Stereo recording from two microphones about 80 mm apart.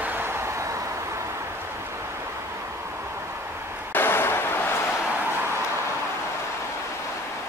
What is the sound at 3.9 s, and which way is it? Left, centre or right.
Vehicle, left.